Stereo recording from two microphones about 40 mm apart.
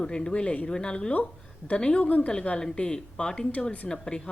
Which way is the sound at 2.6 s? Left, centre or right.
Left.